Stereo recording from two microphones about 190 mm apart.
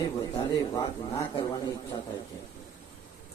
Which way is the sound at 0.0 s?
20° left (ahead or behind).